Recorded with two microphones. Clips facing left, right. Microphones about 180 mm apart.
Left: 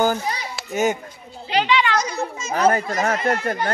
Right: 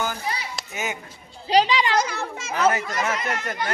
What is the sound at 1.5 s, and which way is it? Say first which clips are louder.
Speech: right 1 dB; 35° right (ahead or behind).